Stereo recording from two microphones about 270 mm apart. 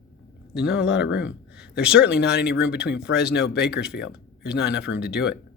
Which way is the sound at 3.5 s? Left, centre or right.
Left.